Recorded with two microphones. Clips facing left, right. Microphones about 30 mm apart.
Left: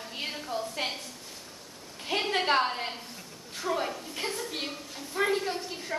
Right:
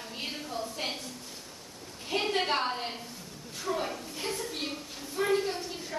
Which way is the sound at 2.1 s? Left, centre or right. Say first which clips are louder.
Left 1 dB; left.